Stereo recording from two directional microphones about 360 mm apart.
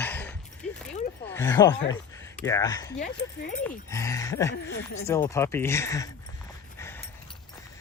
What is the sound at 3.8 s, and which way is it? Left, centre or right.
Speech, centre.